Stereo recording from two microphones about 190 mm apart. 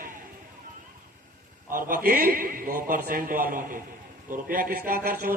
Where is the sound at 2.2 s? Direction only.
50° right (ahead or behind).